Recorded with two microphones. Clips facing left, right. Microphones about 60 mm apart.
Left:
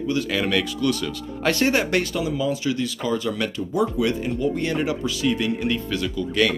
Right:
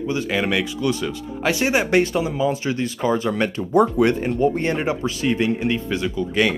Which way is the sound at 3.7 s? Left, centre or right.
Right.